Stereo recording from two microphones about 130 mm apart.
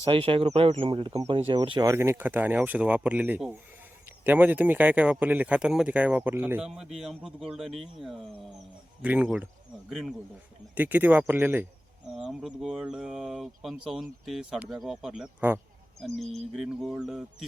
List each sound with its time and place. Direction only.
0.0 s speech: 45° right (ahead or behind)
1.8 s speech: 20° right (ahead or behind)
6.7 s speech: 5° right (ahead or behind)
10.8 s speech: 15° right (ahead or behind)
12.1 s speech: 5° right (ahead or behind)